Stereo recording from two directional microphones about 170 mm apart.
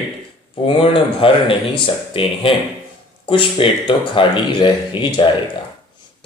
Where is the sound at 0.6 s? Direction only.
30° left (ahead or behind).